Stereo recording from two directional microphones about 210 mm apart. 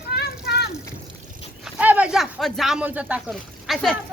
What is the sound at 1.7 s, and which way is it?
Speech, 5° right (ahead or behind).